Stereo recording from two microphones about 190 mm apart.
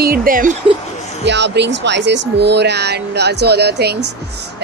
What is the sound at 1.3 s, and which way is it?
Speech, 65° right (ahead or behind).